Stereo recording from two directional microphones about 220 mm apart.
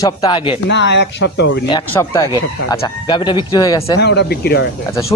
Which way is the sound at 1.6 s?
20° left (ahead or behind).